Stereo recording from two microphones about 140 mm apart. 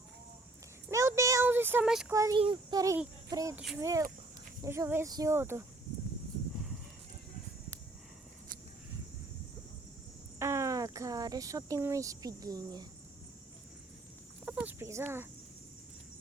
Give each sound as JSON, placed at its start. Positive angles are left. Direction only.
{"t": 0.9, "sound": "child singing", "side_deg": -20}
{"t": 2.0, "sound": "speech", "side_deg": -25}
{"t": 2.4, "sound": "a child's voice", "side_deg": -35}
{"t": 3.2, "sound": "child singing", "side_deg": -25}
{"t": 3.8, "sound": "speech", "side_deg": -20}
{"t": 10.4, "sound": "speech", "side_deg": -20}
{"t": 14.4, "sound": "a sound", "side_deg": -10}